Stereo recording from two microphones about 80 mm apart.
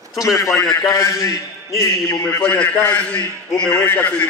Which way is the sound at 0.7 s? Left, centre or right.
Left.